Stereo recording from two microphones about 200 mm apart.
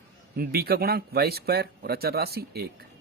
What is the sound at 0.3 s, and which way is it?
Speech, 50° right (ahead or behind).